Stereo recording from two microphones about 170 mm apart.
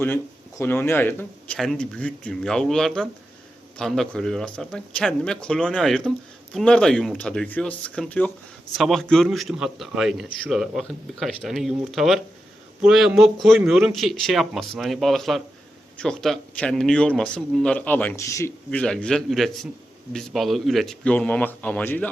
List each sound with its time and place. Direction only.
0.0 s a man's voice: 10° left (ahead or behind)
18.7 s a man's voice: 5° left (ahead or behind)